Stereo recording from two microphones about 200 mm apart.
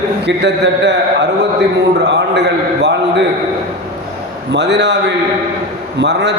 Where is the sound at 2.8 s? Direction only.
60° right (ahead or behind).